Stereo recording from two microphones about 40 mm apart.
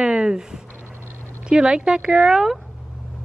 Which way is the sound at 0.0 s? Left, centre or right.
Right.